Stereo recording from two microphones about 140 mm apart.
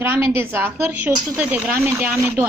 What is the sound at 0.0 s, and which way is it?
A woman's voice, 15° right (ahead or behind).